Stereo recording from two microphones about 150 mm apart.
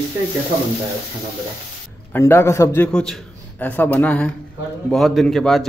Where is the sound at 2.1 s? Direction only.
15° left (ahead or behind).